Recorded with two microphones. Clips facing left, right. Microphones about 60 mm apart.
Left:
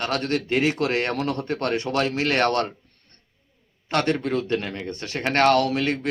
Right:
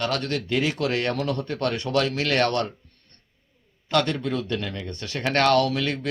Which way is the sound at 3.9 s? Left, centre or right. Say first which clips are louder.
Left 1 dB; left.